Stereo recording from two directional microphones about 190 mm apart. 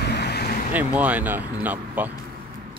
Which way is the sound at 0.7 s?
10° right (ahead or behind).